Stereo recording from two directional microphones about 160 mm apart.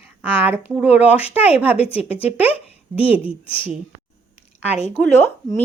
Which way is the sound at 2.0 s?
35° left (ahead or behind).